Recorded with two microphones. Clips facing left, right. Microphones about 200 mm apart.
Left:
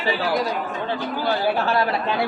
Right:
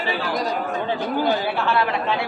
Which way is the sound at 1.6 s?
40° left (ahead or behind).